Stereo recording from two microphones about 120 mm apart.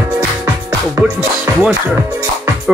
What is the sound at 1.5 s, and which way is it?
Music, 25° right (ahead or behind).